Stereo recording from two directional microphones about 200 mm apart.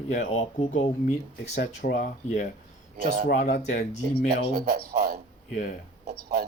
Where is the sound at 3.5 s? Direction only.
55° left (ahead or behind).